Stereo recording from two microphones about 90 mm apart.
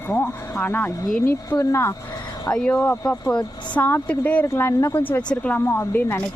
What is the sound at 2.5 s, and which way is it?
A woman's voice, 15° left (ahead or behind).